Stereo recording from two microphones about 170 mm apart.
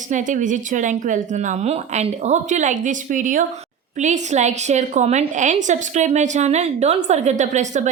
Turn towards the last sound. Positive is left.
turn(degrees=-45)  # may be behind; listen again after turning